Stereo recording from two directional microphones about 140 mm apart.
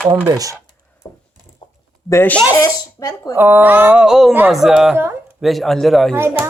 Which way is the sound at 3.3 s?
15° right (ahead or behind).